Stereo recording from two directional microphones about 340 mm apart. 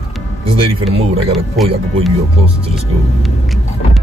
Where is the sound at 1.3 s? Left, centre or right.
Centre.